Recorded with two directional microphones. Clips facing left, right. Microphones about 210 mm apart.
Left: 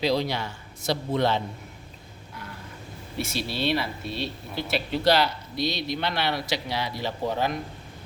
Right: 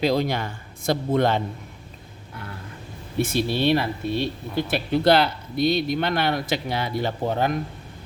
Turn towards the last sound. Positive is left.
turn(degrees=-50)  # may be behind; listen again after turning